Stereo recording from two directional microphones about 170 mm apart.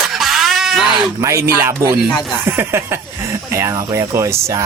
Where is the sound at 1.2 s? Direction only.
15° right (ahead or behind).